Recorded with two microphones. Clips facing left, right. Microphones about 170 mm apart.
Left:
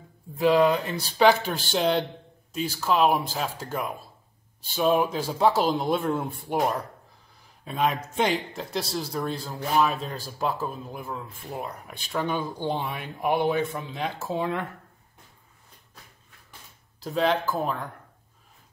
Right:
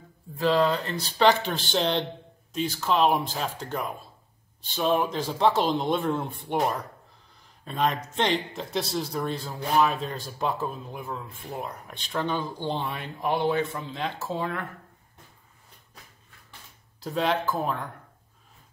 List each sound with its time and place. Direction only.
0.4 s speech: 15° left (ahead or behind)
17.0 s speech: centre (ahead or behind)